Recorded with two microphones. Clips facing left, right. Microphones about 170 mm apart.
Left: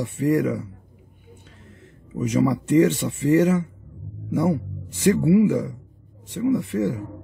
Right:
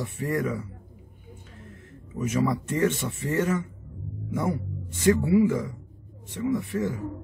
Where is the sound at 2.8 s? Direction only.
15° left (ahead or behind).